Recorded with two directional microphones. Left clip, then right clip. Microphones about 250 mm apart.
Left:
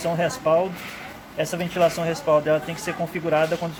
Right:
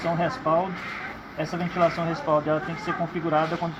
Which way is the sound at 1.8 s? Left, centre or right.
Left.